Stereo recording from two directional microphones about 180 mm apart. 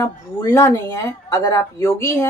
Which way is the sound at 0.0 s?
15° left (ahead or behind).